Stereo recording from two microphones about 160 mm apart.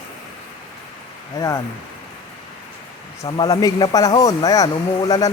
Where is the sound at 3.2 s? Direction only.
25° left (ahead or behind).